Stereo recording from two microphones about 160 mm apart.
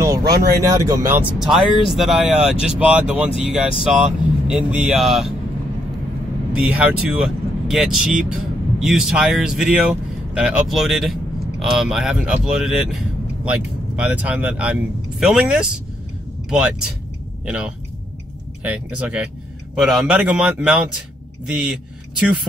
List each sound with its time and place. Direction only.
0.0 s a sound: 20° right (ahead or behind)
0.3 s speech: 75° right (ahead or behind)
0.6 s speech: 20° right (ahead or behind)
1.4 s speech: centre (ahead or behind)
6.5 s speech: 10° right (ahead or behind)